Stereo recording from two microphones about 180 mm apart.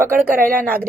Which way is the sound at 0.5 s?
55° right (ahead or behind).